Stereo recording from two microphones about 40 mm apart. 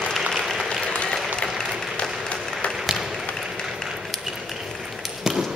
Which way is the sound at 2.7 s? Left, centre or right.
Centre.